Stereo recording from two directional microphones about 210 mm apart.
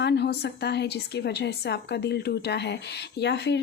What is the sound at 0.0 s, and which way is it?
A woman's voice, 50° left (ahead or behind).